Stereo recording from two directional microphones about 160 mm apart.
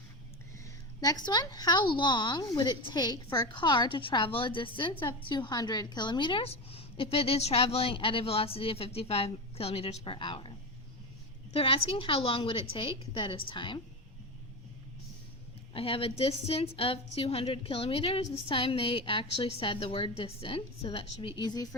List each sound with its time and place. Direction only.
0.6 s a woman's voice: 25° left (ahead or behind)
11.5 s a woman's voice: 35° left (ahead or behind)
15.7 s a woman's voice: 35° left (ahead or behind)